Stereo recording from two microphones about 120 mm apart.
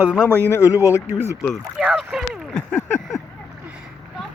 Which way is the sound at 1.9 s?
Centre (ahead or behind).